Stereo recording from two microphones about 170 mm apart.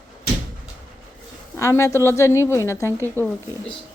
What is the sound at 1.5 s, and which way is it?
A woman's voice, 15° left (ahead or behind).